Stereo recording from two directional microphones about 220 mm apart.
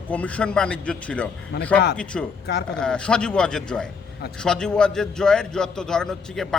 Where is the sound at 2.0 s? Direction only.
5° left (ahead or behind).